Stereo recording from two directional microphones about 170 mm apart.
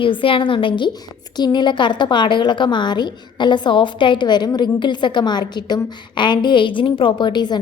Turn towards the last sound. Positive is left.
turn(degrees=25)  # may be behind; listen again after turning